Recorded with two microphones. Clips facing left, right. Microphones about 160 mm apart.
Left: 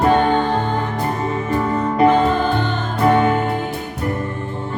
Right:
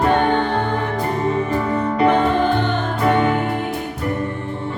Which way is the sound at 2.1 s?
65° right (ahead or behind).